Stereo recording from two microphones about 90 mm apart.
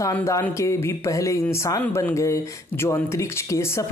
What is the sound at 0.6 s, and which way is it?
Speech, 30° left (ahead or behind).